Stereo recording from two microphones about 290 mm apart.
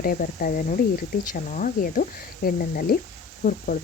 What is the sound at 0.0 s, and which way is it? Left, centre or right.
Speech, left.